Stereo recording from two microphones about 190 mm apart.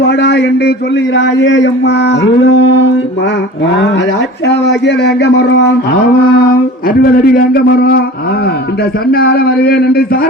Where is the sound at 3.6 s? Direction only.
65° left (ahead or behind).